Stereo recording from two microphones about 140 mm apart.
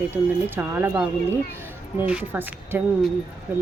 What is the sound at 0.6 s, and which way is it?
A woman's voice, 15° right (ahead or behind).